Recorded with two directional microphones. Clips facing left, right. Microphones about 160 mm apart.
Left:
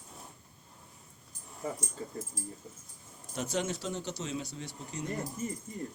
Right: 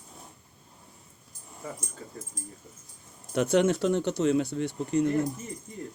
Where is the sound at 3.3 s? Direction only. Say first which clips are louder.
Right 11 dB; 60° right (ahead or behind).